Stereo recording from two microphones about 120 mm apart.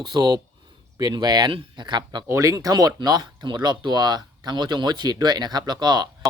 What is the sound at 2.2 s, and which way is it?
Speech, 25° right (ahead or behind).